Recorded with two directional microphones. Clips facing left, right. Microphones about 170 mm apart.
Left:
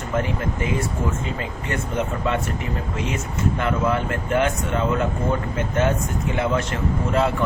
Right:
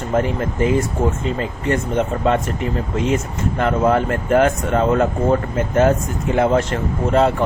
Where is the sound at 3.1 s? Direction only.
35° right (ahead or behind).